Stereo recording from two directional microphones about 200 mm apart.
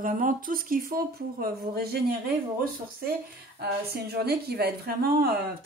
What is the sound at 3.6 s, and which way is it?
Speech, 55° right (ahead or behind).